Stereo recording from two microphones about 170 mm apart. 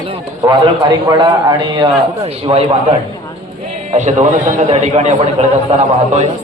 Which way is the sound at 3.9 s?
45° right (ahead or behind).